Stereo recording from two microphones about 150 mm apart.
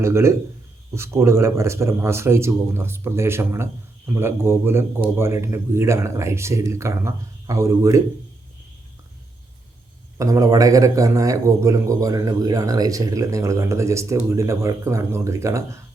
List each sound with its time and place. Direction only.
0.0 s speech: 20° right (ahead or behind)
10.2 s a man's voice: 20° right (ahead or behind)